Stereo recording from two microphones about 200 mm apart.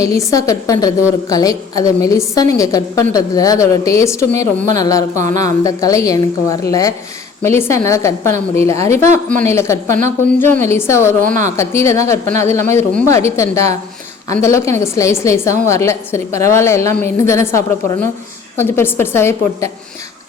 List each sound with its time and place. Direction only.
0.0 s a woman's voice: 15° left (ahead or behind)